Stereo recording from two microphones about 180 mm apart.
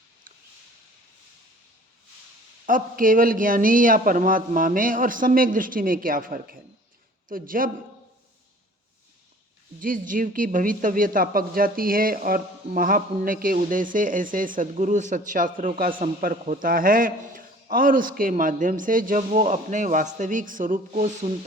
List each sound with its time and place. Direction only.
2.6 s speech: 50° right (ahead or behind)
9.8 s speech: 50° right (ahead or behind)
21.2 s a sound: 35° right (ahead or behind)